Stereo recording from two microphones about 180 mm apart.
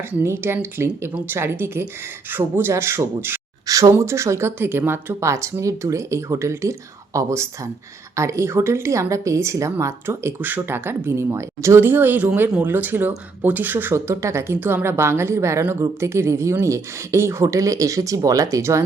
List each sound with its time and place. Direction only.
0.1 s a woman's voice: 10° right (ahead or behind)